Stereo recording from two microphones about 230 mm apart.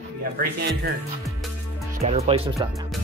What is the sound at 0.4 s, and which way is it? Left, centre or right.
Speech, right.